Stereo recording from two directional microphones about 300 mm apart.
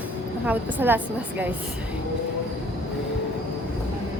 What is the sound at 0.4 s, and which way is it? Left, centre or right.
A woman's voice, centre.